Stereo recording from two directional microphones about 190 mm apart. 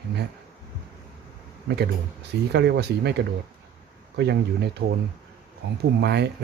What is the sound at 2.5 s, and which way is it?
Speech, 60° right (ahead or behind).